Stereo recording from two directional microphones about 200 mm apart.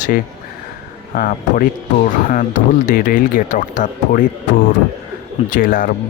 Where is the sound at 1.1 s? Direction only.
45° left (ahead or behind).